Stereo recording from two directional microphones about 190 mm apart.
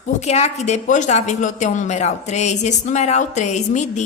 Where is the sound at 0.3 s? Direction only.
35° left (ahead or behind).